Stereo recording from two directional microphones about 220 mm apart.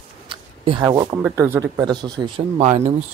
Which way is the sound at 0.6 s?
20° right (ahead or behind).